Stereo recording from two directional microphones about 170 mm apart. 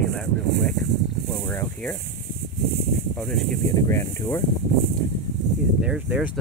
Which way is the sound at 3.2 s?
5° left (ahead or behind).